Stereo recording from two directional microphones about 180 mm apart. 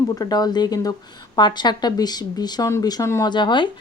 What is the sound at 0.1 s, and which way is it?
A woman's voice, 20° left (ahead or behind).